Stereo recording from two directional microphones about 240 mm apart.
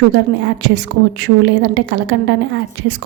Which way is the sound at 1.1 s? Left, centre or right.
Right.